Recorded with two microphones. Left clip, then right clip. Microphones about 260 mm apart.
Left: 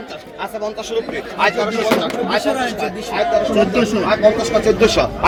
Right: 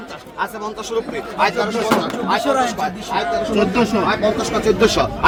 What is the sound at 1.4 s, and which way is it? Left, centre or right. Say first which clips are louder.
Speech: left 1 dB; right.